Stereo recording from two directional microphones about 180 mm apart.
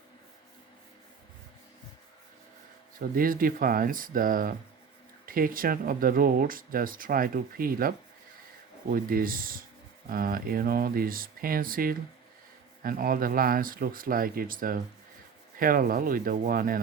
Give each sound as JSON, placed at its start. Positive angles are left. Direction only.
{"t": 3.0, "sound": "speech", "side_deg": -50}